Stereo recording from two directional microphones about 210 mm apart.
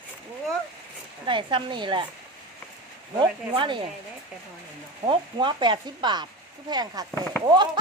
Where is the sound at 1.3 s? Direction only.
25° right (ahead or behind).